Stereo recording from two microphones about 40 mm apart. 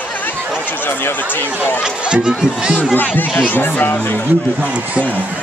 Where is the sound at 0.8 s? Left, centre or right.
Left.